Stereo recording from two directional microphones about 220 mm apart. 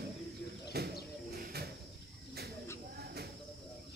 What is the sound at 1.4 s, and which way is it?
Cricket, 45° right (ahead or behind).